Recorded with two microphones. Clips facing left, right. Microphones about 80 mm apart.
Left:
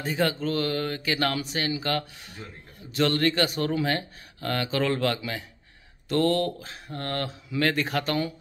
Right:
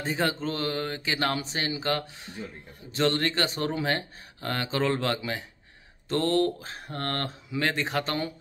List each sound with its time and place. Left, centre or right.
0.0 s speech: right
6.9 s speech: right
7.4 s speech: right